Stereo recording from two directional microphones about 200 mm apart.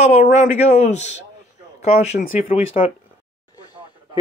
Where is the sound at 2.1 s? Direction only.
30° left (ahead or behind).